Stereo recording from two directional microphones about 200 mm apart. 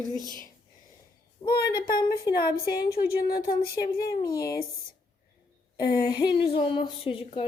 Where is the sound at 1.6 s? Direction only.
50° left (ahead or behind).